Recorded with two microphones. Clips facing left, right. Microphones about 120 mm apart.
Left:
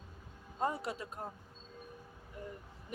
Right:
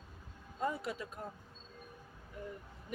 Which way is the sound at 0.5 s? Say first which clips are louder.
Left 1 dB; 35° left (ahead or behind).